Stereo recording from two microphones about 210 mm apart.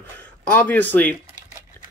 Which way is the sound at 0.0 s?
5° left (ahead or behind).